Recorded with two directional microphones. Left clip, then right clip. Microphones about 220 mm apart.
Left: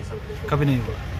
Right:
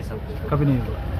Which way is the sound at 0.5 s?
10° left (ahead or behind).